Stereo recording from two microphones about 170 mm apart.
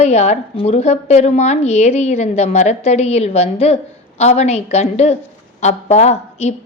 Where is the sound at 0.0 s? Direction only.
40° left (ahead or behind).